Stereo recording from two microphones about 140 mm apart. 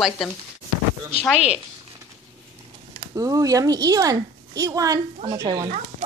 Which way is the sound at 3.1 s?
25° right (ahead or behind).